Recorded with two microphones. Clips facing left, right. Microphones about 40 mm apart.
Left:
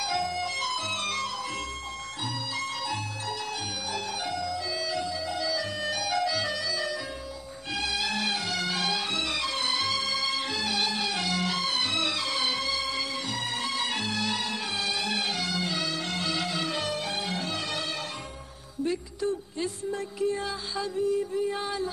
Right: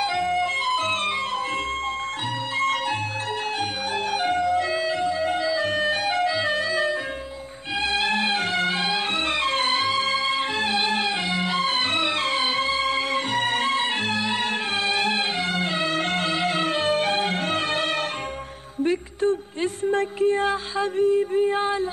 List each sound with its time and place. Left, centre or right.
0.0 s music: right
2.6 s music: right